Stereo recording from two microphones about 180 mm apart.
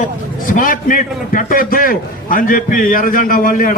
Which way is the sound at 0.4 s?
50° left (ahead or behind).